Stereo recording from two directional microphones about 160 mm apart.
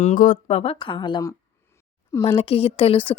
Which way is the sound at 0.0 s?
55° left (ahead or behind).